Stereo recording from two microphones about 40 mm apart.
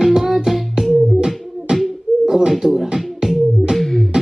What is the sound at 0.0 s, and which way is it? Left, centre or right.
Music, centre.